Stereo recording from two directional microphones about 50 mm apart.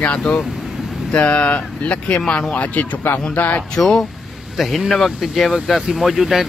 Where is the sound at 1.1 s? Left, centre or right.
Left.